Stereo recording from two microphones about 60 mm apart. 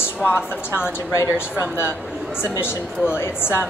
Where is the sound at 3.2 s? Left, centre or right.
Left.